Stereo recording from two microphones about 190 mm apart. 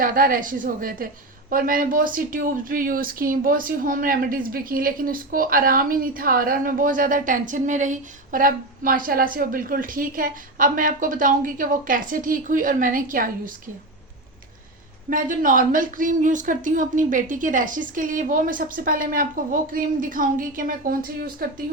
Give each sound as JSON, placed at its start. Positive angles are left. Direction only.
{"t": 0.0, "sound": "a woman's voice", "side_deg": -45}
{"t": 15.1, "sound": "a woman's voice", "side_deg": -45}